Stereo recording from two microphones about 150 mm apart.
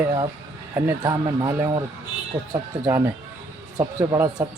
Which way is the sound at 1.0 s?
25° right (ahead or behind).